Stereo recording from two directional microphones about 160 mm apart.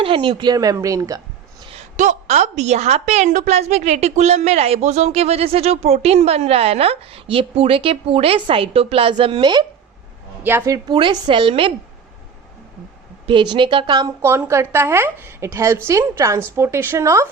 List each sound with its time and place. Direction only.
0.0 s speech: 30° right (ahead or behind)
2.0 s a woman's voice: 45° right (ahead or behind); by 9.6 s 30° right (ahead or behind)
10.4 s a woman's voice: 15° right (ahead or behind)
10.8 s a woman's voice: 30° right (ahead or behind)
13.2 s a woman's voice: 30° right (ahead or behind)